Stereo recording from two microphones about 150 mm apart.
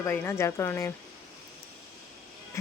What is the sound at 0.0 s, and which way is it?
Speech, 15° left (ahead or behind).